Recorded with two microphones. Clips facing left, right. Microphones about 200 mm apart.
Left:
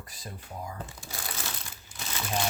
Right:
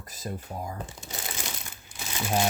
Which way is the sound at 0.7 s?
20° right (ahead or behind).